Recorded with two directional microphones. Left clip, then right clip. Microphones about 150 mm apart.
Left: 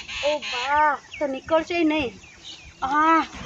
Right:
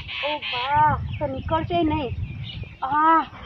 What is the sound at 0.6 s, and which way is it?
Speech, 40° left (ahead or behind).